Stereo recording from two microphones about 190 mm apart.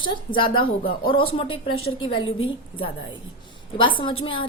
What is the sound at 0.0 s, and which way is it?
Speech, 25° left (ahead or behind).